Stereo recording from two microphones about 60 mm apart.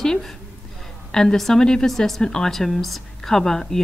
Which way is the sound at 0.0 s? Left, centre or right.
Centre.